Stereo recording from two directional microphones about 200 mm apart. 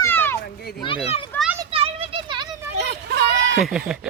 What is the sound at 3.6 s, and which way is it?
Speech, 5° right (ahead or behind).